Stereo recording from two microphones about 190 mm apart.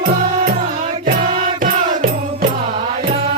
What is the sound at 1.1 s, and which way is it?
Music, 45° right (ahead or behind).